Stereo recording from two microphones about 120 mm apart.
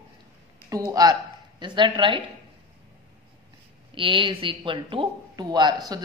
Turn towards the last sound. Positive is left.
turn(degrees=-35)  # may be behind; listen again after turning